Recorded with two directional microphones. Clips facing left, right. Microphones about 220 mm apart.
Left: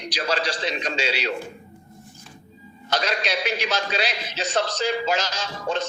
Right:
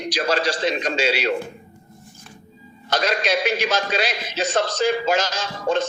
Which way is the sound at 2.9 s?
50° right (ahead or behind).